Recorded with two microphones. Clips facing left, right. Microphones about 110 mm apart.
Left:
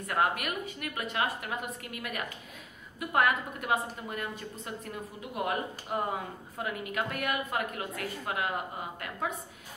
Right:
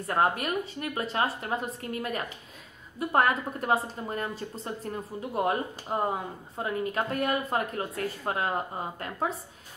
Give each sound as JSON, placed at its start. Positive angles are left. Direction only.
{"t": 0.0, "sound": "a woman's voice", "side_deg": -30}